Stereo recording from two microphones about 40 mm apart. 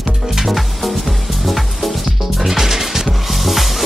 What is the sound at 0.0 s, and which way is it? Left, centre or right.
Music, centre.